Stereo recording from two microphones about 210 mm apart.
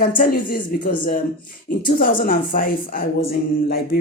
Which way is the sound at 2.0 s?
40° left (ahead or behind).